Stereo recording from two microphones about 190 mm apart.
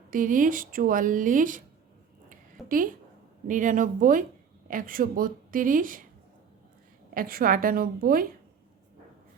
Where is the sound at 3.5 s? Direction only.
45° right (ahead or behind).